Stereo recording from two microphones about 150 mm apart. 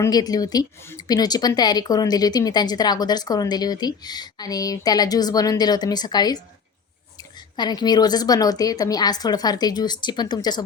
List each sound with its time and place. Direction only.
0.0 s speech: 25° left (ahead or behind)